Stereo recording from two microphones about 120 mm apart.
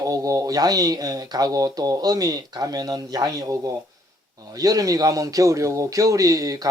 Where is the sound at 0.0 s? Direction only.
30° right (ahead or behind).